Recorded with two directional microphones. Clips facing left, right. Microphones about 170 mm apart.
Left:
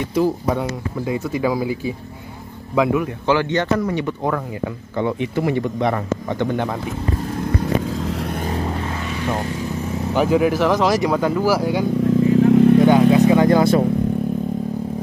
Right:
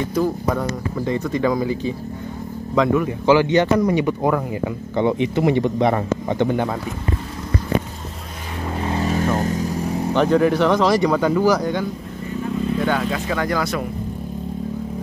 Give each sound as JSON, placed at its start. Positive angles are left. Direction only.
{"t": 0.6, "sound": "speech", "side_deg": 5}
{"t": 3.3, "sound": "speech", "side_deg": -10}
{"t": 4.9, "sound": "speech", "side_deg": -20}
{"t": 6.4, "sound": "speech", "side_deg": -10}
{"t": 9.0, "sound": "vehicle", "side_deg": -40}
{"t": 10.1, "sound": "speech", "side_deg": 5}
{"t": 12.2, "sound": "vehicle", "side_deg": 90}
{"t": 12.8, "sound": "vehicle", "side_deg": 15}